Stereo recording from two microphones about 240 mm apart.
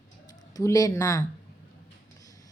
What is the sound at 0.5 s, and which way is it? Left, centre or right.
Speech, centre.